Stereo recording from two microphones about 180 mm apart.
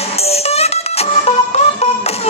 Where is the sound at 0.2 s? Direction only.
35° left (ahead or behind).